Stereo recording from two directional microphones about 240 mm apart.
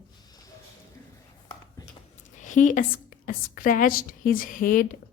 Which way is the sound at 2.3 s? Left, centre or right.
Left.